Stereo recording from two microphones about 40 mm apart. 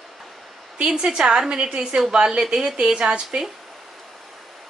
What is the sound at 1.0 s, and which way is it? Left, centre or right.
A woman's voice, right.